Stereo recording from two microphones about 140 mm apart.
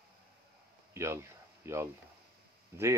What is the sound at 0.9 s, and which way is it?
Speech, 20° right (ahead or behind).